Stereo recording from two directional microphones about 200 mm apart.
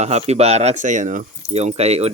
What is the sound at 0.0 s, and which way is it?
Speech, 35° right (ahead or behind).